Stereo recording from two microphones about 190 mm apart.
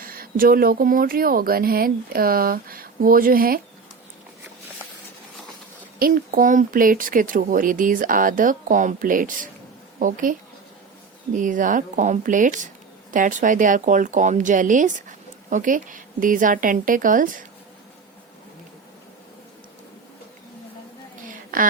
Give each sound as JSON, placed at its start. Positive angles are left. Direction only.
{"t": 0.0, "sound": "speech", "side_deg": -50}
{"t": 6.0, "sound": "speech", "side_deg": -50}
{"t": 11.3, "sound": "speech", "side_deg": -45}
{"t": 21.2, "sound": "a sound", "side_deg": -45}